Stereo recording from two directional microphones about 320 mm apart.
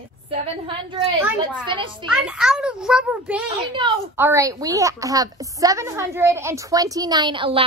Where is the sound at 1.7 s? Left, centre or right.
Centre.